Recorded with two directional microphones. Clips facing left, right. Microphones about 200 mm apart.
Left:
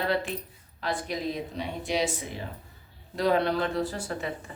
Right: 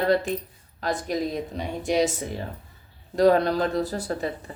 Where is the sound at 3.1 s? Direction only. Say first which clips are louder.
Right 6 dB; 45° right (ahead or behind).